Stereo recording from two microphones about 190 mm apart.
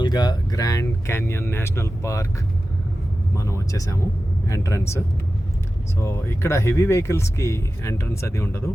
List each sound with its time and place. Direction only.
0.0 s speech: 20° left (ahead or behind)
3.3 s speech: 15° left (ahead or behind)